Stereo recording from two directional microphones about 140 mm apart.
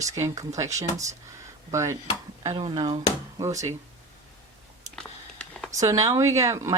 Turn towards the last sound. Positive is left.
turn(degrees=-20)  # may be behind; listen again after turning